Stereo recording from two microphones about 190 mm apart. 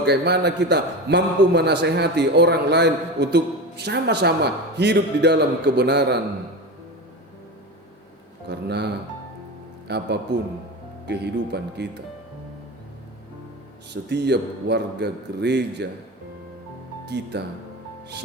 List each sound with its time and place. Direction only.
0.0 s a man's voice: 60° right (ahead or behind)
8.4 s a man's voice: 60° right (ahead or behind)
9.9 s a man's voice: 65° right (ahead or behind)
13.9 s a man's voice: 60° right (ahead or behind)
17.3 s a man's voice: 60° right (ahead or behind)